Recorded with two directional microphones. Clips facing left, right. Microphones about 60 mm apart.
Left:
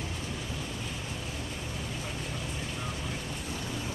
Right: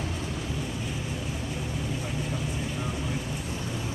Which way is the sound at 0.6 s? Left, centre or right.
Centre.